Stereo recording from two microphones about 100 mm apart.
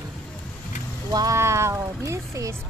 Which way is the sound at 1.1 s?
40° right (ahead or behind).